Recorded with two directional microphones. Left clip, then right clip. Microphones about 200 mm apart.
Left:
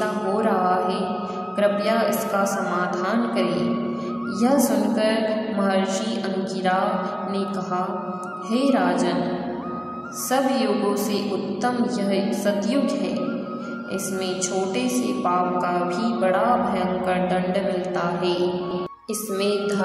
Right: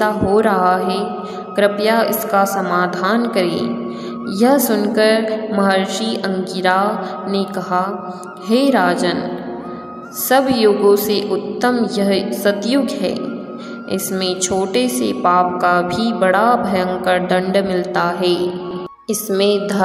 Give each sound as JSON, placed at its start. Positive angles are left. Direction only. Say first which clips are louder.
{"t": 0.0, "sound": "a woman's voice", "louder": "right 8 dB", "side_deg": -35}
{"t": 8.5, "sound": "a woman's voice", "louder": "right 7 dB", "side_deg": -35}
{"t": 10.3, "sound": "a woman's voice", "louder": "right 8 dB", "side_deg": -35}